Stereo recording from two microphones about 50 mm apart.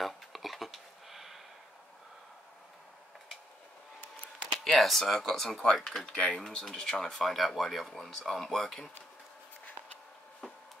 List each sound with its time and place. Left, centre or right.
0.0 s a sound: centre
4.6 s speech: centre
6.0 s speech: centre